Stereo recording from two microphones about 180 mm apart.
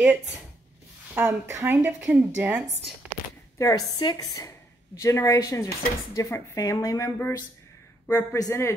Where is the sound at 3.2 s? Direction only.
55° left (ahead or behind).